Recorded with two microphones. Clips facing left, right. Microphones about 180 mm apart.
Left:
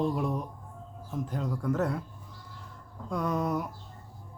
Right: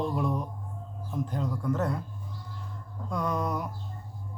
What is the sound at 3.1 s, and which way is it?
Speech, 5° left (ahead or behind).